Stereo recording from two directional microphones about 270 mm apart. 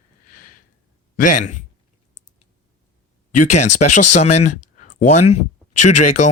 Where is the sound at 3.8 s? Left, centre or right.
Left.